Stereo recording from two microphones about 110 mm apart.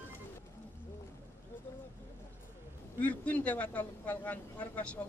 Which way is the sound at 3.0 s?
10° left (ahead or behind).